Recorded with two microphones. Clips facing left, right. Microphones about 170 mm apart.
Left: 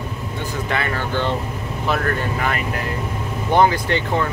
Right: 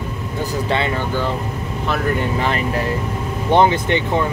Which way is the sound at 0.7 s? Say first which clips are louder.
Right 3 dB; 25° right (ahead or behind).